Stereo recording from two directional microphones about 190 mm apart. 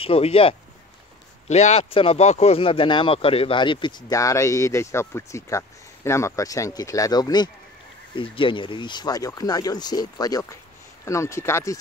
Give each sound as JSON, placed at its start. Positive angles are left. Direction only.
{"t": 0.0, "sound": "speech", "side_deg": 30}